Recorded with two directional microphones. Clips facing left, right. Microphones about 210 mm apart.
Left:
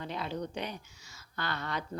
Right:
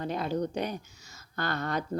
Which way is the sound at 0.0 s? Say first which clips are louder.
Right 6 dB; 45° right (ahead or behind).